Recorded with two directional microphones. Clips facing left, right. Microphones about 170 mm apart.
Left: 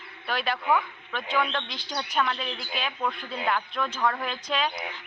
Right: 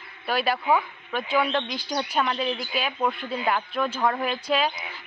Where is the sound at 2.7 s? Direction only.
5° right (ahead or behind).